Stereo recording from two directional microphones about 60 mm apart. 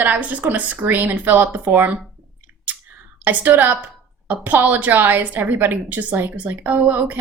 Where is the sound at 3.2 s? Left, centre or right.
Right.